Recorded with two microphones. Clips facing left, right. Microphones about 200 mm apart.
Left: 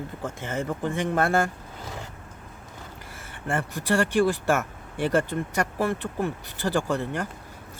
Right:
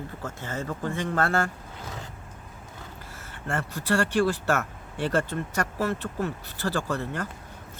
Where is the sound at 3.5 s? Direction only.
15° left (ahead or behind).